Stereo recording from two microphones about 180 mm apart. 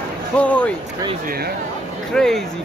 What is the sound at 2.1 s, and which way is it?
Speech, 5° left (ahead or behind).